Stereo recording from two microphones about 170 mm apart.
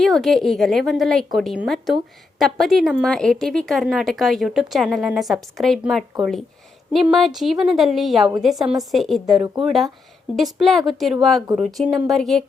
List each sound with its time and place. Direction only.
0.0 s a woman's voice: centre (ahead or behind)